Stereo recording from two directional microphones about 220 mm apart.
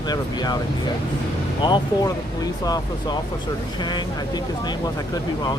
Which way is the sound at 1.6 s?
20° left (ahead or behind).